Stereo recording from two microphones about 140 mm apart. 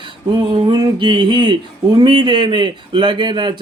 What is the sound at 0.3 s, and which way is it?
Mantra, 35° right (ahead or behind).